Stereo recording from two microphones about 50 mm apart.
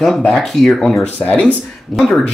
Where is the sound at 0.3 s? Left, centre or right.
Centre.